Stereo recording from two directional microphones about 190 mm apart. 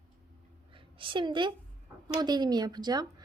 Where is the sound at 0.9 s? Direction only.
25° right (ahead or behind).